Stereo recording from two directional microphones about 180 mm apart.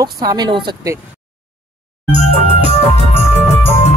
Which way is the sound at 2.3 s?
35° left (ahead or behind).